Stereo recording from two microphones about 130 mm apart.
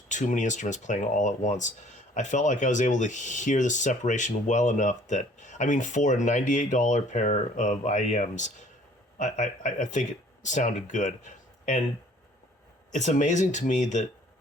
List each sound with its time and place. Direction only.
0.1 s speech: 70° left (ahead or behind)
12.9 s speech: 70° left (ahead or behind)